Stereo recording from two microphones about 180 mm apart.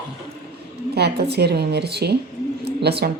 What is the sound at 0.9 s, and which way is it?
A woman's voice, 65° right (ahead or behind).